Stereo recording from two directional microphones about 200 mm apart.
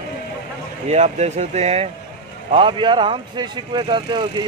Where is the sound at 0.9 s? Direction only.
35° right (ahead or behind).